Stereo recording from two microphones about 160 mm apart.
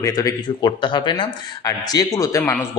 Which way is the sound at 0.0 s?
20° left (ahead or behind).